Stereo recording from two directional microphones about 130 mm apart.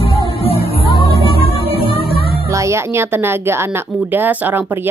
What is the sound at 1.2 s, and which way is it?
Music, 45° left (ahead or behind).